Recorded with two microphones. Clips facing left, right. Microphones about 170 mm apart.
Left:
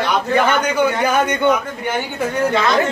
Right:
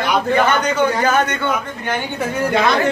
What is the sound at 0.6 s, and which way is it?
Speech, 10° left (ahead or behind).